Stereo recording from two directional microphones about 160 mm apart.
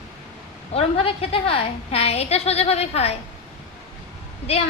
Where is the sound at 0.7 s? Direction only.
40° left (ahead or behind).